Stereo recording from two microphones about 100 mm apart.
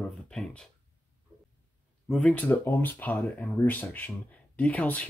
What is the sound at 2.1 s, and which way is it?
Speech, 5° left (ahead or behind).